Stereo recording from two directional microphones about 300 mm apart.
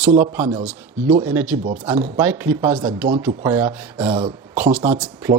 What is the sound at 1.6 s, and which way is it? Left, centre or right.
Speech, right.